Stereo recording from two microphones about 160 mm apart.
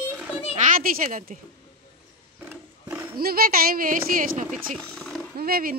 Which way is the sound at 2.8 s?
15° right (ahead or behind).